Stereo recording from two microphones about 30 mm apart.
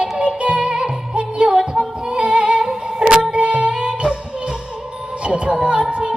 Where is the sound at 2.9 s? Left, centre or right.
Right.